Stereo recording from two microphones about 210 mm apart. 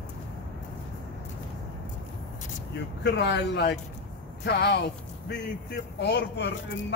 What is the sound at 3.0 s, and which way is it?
Speech, 55° left (ahead or behind).